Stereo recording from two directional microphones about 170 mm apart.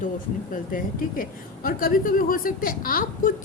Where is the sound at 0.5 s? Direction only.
55° left (ahead or behind).